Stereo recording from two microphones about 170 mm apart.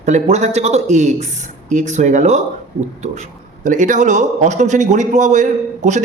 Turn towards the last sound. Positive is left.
turn(degrees=-45)  # may be behind; listen again after turning